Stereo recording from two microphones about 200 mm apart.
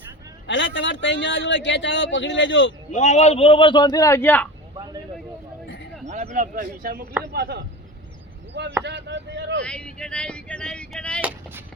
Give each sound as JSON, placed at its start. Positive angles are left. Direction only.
{"t": 0.4, "sound": "speech", "side_deg": 65}
{"t": 2.9, "sound": "a man's voice", "side_deg": 35}
{"t": 6.1, "sound": "speech", "side_deg": -40}
{"t": 8.8, "sound": "speech", "side_deg": -60}
{"t": 9.6, "sound": "speech", "side_deg": 5}
{"t": 11.2, "sound": "a sound", "side_deg": -5}